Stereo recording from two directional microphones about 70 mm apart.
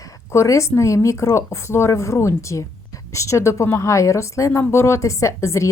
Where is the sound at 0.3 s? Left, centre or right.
Left.